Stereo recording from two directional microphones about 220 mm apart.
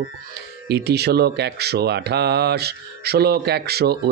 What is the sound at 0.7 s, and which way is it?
Speech, 50° right (ahead or behind).